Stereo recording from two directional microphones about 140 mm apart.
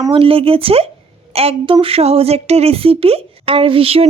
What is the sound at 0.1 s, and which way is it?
A woman's voice, 40° right (ahead or behind).